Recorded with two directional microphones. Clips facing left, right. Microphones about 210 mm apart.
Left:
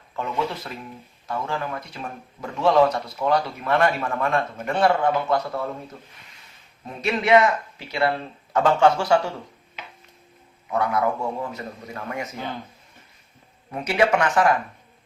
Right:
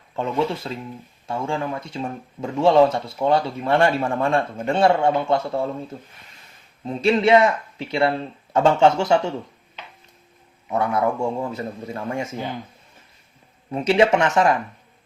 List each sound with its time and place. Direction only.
0.2 s speech: 30° right (ahead or behind)
10.7 s speech: 25° right (ahead or behind)
13.7 s speech: 25° right (ahead or behind)